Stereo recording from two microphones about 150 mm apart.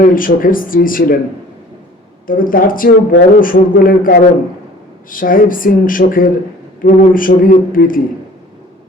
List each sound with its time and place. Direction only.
0.0 s a man's voice: 65° left (ahead or behind)
2.2 s a man's voice: 65° left (ahead or behind)